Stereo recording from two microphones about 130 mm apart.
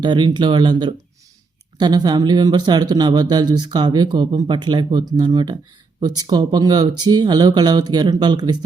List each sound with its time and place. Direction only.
0.0 s speech: 35° right (ahead or behind)